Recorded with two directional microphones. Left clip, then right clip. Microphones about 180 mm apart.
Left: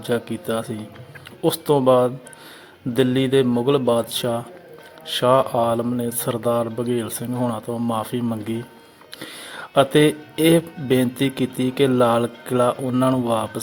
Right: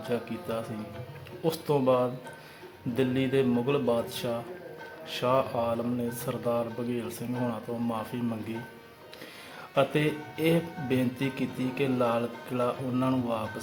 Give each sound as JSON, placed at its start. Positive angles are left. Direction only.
{"t": 0.0, "sound": "speech", "side_deg": 45}
{"t": 9.6, "sound": "speech", "side_deg": 50}